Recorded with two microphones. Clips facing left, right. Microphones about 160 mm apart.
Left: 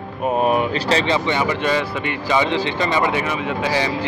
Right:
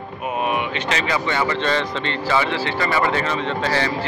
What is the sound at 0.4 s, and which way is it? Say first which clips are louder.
Speech: left 4 dB; 40° left (ahead or behind).